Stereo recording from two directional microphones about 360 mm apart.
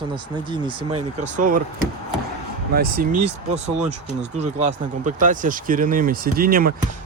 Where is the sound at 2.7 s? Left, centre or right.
Right.